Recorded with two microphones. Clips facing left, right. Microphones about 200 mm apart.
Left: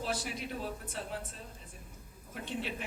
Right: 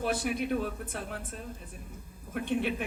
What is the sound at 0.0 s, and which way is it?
A woman's voice, 55° right (ahead or behind).